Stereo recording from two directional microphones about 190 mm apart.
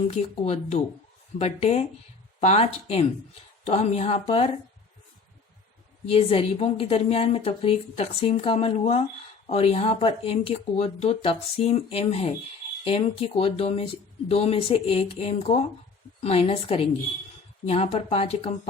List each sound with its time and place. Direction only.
0.1 s a woman's voice: 35° left (ahead or behind)
6.1 s a woman's voice: 30° left (ahead or behind)